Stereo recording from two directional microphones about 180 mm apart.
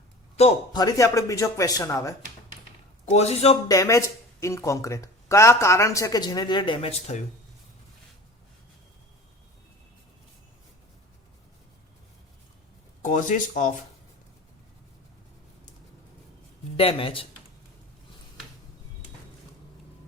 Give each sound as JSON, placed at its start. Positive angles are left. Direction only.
{"t": 0.7, "sound": "speech", "side_deg": 20}
{"t": 3.1, "sound": "speech", "side_deg": 35}
{"t": 3.7, "sound": "speech", "side_deg": 15}
{"t": 13.0, "sound": "speech", "side_deg": 45}
{"t": 16.7, "sound": "speech", "side_deg": 30}